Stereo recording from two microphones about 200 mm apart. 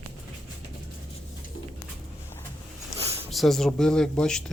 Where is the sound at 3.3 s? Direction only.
Centre (ahead or behind).